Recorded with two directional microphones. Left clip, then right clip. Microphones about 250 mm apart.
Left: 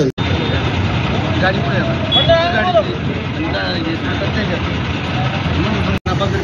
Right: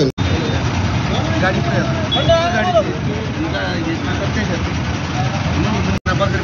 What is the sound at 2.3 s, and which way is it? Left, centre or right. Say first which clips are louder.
Vehicle: right 1 dB; centre.